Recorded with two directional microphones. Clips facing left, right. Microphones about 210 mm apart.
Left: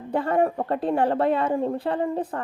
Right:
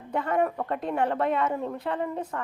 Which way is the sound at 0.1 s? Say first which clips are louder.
Left 4 dB; 30° left (ahead or behind).